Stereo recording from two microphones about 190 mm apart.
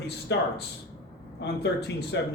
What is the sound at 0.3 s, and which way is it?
A man's voice, 70° left (ahead or behind).